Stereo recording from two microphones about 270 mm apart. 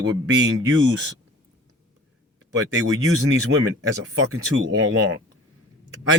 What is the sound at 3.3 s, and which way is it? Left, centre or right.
Speech, right.